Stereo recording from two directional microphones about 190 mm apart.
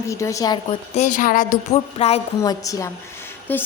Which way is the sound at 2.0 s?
30° left (ahead or behind).